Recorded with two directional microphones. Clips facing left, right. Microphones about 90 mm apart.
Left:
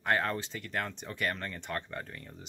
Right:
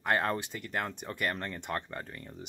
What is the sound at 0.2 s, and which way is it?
Speech, 20° right (ahead or behind).